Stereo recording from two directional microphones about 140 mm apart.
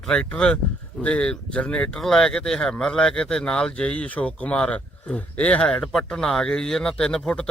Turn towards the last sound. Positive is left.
turn(degrees=5)  # may be behind; listen again after turning